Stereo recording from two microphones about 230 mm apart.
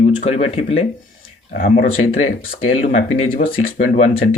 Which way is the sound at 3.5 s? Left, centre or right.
Left.